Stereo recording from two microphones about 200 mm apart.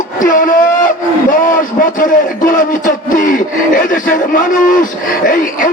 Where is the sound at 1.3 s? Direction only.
45° left (ahead or behind).